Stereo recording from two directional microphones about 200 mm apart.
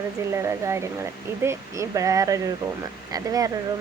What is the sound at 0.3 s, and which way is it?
Speech, 15° right (ahead or behind).